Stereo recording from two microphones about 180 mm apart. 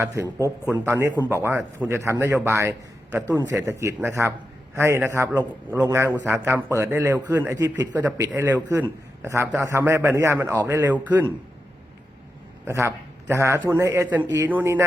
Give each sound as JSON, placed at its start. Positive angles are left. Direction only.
{"t": 0.0, "sound": "a man's voice", "side_deg": -15}
{"t": 12.6, "sound": "a man's voice", "side_deg": -15}